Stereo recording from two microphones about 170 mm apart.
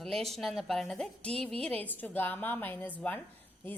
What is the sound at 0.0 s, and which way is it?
A woman's voice, centre (ahead or behind).